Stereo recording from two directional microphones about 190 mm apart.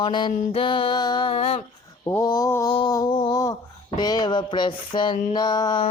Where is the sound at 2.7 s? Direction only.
20° left (ahead or behind).